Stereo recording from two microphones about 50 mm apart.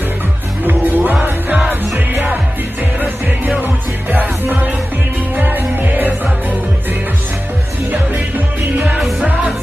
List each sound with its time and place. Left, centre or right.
0.7 s music: right
4.1 s music: right
8.7 s music: right